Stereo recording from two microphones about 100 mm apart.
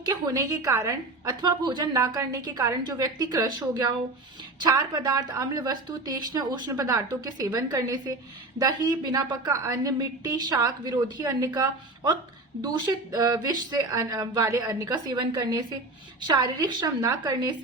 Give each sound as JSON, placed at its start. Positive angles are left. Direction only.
{"t": 0.0, "sound": "a woman's voice", "side_deg": -35}
{"t": 6.7, "sound": "a woman's voice", "side_deg": -35}